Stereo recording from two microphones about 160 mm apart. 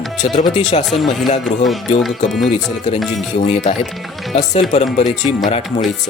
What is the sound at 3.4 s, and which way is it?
Speech, 45° left (ahead or behind).